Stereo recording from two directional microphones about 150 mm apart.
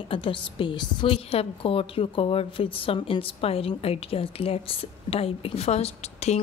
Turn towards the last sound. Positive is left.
turn(degrees=45)  # may be behind; listen again after turning